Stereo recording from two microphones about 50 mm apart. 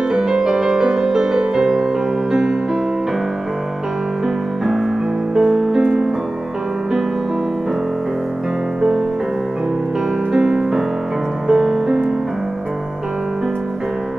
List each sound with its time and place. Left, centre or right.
0.1 s music: centre
5.3 s music: centre
10.3 s music: centre